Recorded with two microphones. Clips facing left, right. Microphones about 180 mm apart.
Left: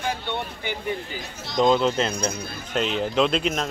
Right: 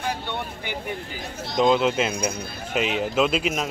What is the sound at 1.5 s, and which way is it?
A man's voice, 5° right (ahead or behind).